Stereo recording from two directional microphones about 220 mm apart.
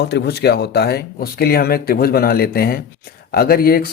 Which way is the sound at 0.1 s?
50° left (ahead or behind).